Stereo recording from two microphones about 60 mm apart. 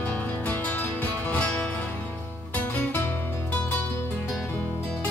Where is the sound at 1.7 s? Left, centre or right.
Left.